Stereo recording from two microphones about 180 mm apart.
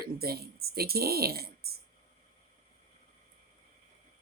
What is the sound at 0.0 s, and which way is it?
Speech, 60° right (ahead or behind).